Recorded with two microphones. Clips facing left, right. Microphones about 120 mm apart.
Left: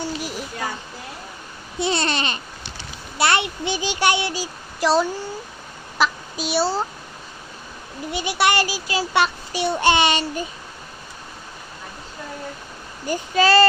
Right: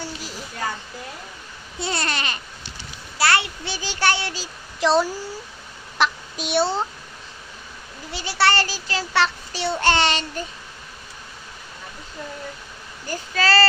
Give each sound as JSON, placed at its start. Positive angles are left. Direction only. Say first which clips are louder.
{"t": 0.0, "sound": "a sound", "louder": "left 6 dB", "side_deg": 15}
{"t": 1.8, "sound": "a child's voice", "louder": "left 4 dB", "side_deg": 20}
{"t": 4.8, "sound": "a child's voice", "louder": "even", "side_deg": 0}
{"t": 6.0, "sound": "child singing", "louder": "left 1 dB", "side_deg": 0}
{"t": 8.1, "sound": "a child's voice", "louder": "left 1 dB", "side_deg": 15}
{"t": 13.1, "sound": "a child's voice", "louder": "left 4 dB", "side_deg": 20}